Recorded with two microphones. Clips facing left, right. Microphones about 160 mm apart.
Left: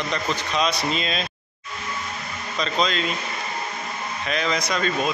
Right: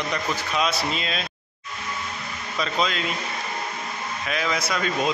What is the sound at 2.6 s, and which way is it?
Speech, 5° right (ahead or behind).